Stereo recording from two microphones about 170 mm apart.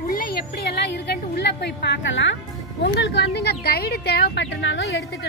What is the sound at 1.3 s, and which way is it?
A woman's voice, 90° left.